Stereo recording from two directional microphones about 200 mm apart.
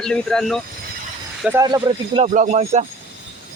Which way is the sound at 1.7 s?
20° right (ahead or behind).